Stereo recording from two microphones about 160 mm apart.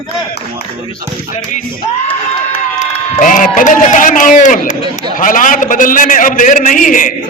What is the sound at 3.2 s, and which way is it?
A man's voice, 55° left (ahead or behind).